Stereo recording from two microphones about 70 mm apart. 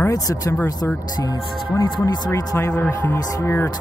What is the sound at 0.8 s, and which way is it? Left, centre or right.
Speech, left.